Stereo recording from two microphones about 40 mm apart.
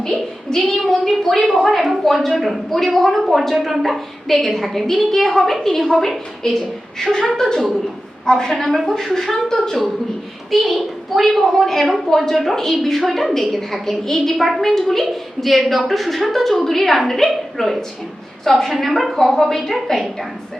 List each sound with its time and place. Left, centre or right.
0.0 s child singing: centre
0.9 s a woman's voice: centre
6.4 s speech: centre
10.5 s a woman's voice: centre